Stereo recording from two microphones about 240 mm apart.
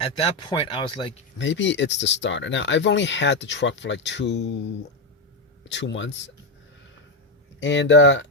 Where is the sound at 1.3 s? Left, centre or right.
Left.